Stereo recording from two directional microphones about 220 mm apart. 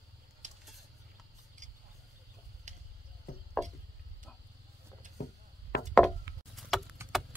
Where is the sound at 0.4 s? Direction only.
35° right (ahead or behind).